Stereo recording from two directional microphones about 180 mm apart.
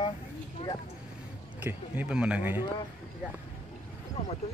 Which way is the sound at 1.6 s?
10° right (ahead or behind).